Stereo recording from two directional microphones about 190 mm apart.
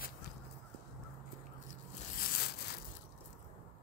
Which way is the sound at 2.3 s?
55° left (ahead or behind).